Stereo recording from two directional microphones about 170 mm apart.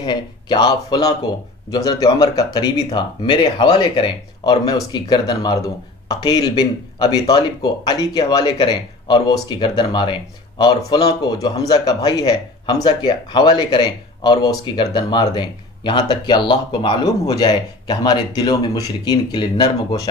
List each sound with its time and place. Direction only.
0.0 s speech: 25° left (ahead or behind)